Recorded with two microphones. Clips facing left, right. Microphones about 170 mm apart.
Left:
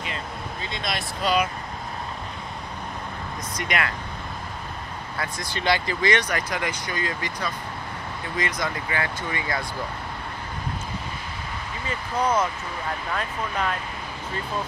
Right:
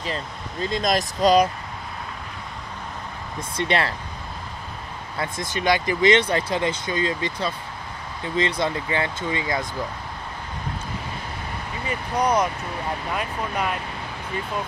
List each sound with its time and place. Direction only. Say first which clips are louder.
0.0 s speech: right 2 dB; 40° right (ahead or behind)
3.5 s speech: right 5 dB; 30° right (ahead or behind)
5.2 s speech: right 3 dB; 20° right (ahead or behind)
11.9 s speech: right 2 dB; 15° right (ahead or behind)